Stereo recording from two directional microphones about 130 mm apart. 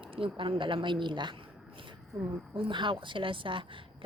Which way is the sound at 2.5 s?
40° right (ahead or behind).